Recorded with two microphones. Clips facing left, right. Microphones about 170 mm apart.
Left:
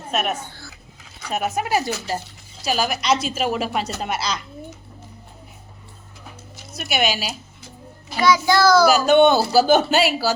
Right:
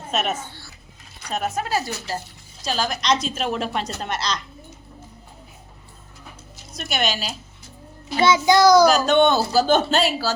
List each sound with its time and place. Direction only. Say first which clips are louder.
0.1 s a woman's voice: left 1 dB; centre (ahead or behind)
6.7 s a woman's voice: left 2 dB; 5° left (ahead or behind)
8.2 s child singing: right 1 dB; 20° right (ahead or behind)
8.9 s a woman's voice: left 3 dB; 10° left (ahead or behind)